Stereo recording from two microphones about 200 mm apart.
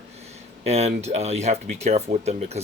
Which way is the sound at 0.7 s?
30° right (ahead or behind).